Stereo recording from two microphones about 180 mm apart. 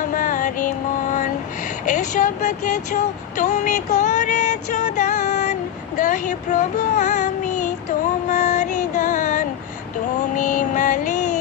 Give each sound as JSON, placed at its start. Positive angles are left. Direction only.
{"t": 0.1, "sound": "music", "side_deg": 45}
{"t": 1.9, "sound": "speech", "side_deg": 45}
{"t": 8.3, "sound": "music", "side_deg": 40}